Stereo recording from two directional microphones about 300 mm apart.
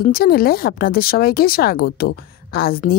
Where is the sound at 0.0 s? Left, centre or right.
Left.